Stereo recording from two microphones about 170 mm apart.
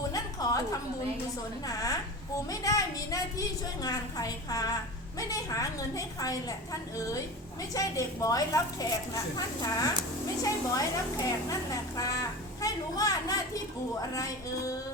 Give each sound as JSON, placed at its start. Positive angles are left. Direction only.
{"t": 0.1, "sound": "a sound", "side_deg": 20}
{"t": 1.6, "sound": "a woman's voice", "side_deg": 20}
{"t": 7.7, "sound": "a woman's voice", "side_deg": 20}